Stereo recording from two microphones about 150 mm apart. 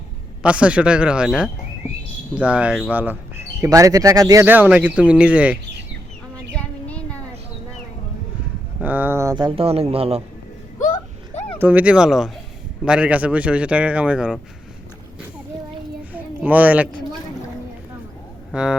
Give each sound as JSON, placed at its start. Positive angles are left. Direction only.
{"t": 0.4, "sound": "speech", "side_deg": -10}
{"t": 3.6, "sound": "speech", "side_deg": -20}
{"t": 4.4, "sound": "speech", "side_deg": -10}
{"t": 6.5, "sound": "a sound", "side_deg": 10}
{"t": 8.8, "sound": "a sound", "side_deg": -10}
{"t": 9.3, "sound": "speech", "side_deg": -30}
{"t": 11.6, "sound": "speech", "side_deg": -10}
{"t": 16.1, "sound": "a sound", "side_deg": -10}
{"t": 18.5, "sound": "speech", "side_deg": -5}